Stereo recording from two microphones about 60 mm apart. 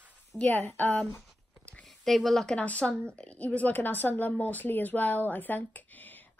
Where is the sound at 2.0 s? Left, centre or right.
Centre.